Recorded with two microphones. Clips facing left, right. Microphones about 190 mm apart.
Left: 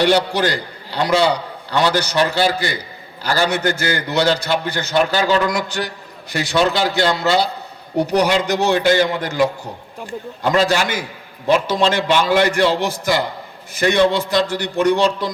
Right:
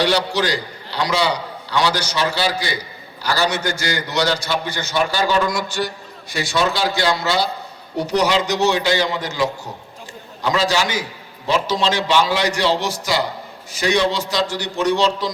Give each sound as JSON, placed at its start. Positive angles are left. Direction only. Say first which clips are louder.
{"t": 0.0, "sound": "a man's voice", "louder": "left 3 dB", "side_deg": 50}